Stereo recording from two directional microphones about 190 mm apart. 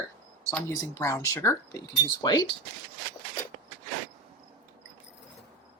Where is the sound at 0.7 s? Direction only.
15° left (ahead or behind).